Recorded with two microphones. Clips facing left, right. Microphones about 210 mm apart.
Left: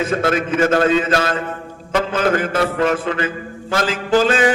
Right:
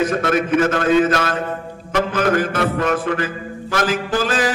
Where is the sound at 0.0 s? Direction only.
30° left (ahead or behind).